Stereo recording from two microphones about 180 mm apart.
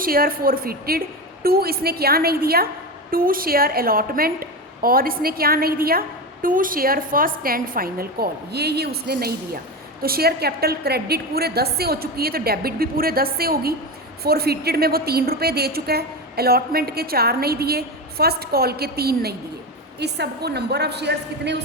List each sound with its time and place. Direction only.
0.0 s a woman's voice: 55° right (ahead or behind)